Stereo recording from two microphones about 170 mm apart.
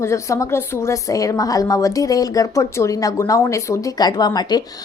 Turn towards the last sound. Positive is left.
turn(degrees=25)  # may be behind; listen again after turning